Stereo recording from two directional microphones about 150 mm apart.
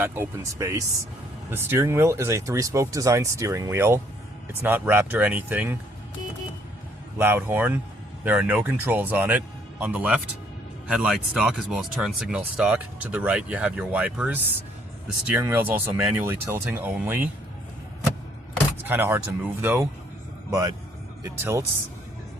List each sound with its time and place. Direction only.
0.0 s speech: 15° right (ahead or behind)
7.2 s speech: 15° right (ahead or behind)
18.5 s speech: 15° right (ahead or behind)